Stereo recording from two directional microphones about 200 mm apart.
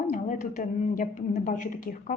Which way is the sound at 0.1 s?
40° left (ahead or behind).